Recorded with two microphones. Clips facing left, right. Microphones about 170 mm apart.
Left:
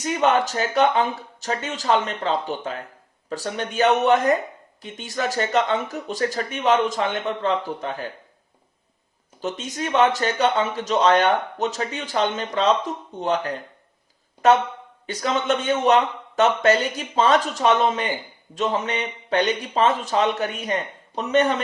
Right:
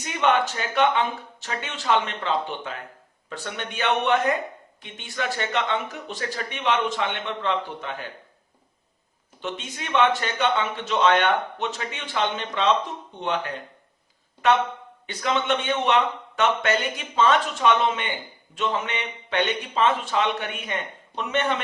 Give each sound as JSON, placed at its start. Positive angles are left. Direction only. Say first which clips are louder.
{"t": 0.0, "sound": "speech", "louder": "left 2 dB", "side_deg": 40}
{"t": 9.4, "sound": "speech", "louder": "left 5 dB", "side_deg": 40}